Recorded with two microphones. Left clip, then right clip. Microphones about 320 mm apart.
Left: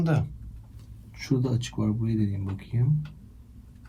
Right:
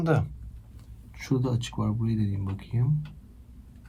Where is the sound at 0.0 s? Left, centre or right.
Centre.